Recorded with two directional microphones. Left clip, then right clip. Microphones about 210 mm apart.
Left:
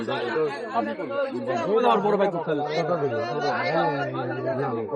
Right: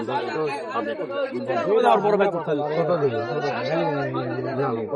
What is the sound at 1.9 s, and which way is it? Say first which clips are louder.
Speech: right 2 dB; centre (ahead or behind).